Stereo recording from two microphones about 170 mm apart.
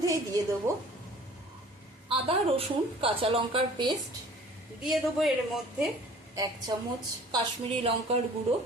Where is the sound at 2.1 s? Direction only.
35° right (ahead or behind).